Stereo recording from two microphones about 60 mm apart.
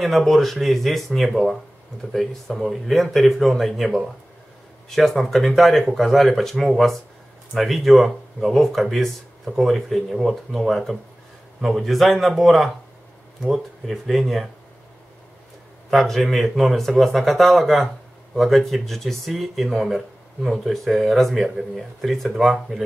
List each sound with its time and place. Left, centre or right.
0.0 s speech: centre
15.9 s speech: centre